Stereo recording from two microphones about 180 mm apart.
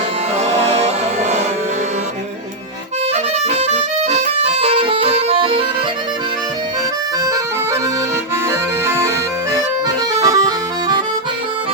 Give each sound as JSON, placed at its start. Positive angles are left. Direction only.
{"t": 0.3, "sound": "music", "side_deg": -35}
{"t": 3.1, "sound": "accordion", "side_deg": -40}
{"t": 7.3, "sound": "accordion", "side_deg": -20}
{"t": 8.8, "sound": "accordion", "side_deg": -15}
{"t": 10.2, "sound": "accordion", "side_deg": -20}